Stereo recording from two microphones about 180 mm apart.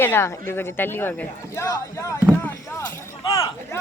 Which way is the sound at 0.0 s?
15° left (ahead or behind).